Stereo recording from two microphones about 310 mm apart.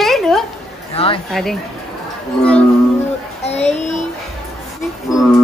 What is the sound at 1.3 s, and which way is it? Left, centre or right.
Speech, centre.